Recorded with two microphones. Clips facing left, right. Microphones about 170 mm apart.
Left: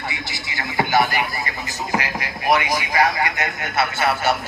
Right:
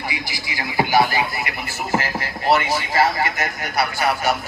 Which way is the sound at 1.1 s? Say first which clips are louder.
Right 1 dB; 20° right (ahead or behind).